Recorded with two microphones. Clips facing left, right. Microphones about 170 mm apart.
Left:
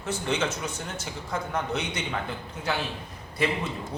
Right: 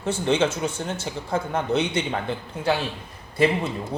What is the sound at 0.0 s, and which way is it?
A man's voice, 30° right (ahead or behind).